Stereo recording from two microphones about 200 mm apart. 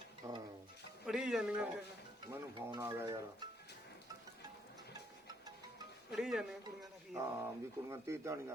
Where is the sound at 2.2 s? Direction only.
20° right (ahead or behind).